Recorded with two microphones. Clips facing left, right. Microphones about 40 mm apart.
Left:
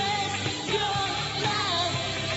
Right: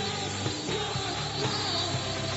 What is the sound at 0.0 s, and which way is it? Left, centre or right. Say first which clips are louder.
Music: left 5 dB; left.